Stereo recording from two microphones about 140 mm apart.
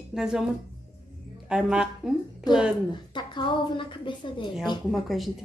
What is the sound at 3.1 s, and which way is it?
A woman's voice, 35° left (ahead or behind).